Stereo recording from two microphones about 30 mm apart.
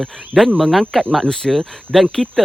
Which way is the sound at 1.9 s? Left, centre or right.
Centre.